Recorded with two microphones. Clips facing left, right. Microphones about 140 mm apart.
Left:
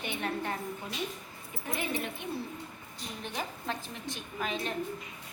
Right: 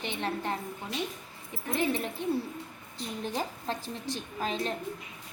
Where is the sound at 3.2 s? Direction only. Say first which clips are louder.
Right 4 dB; 35° right (ahead or behind).